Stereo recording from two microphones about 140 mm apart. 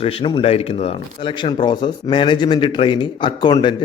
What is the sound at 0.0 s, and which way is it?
Speech, 40° left (ahead or behind).